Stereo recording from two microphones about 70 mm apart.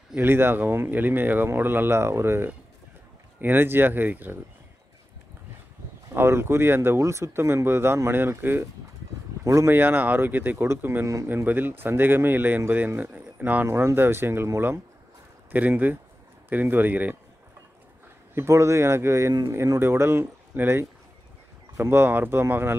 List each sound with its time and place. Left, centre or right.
0.2 s speech: right
6.1 s speech: right
9.4 s speech: right
9.7 s speech: right
13.7 s speech: right
18.3 s speech: right